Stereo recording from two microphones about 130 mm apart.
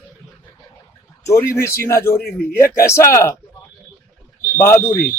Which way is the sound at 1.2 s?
20° left (ahead or behind).